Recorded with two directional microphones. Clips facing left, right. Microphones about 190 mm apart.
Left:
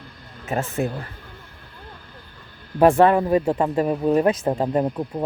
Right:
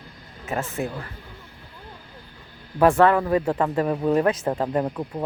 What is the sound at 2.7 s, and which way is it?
Speech, 20° left (ahead or behind).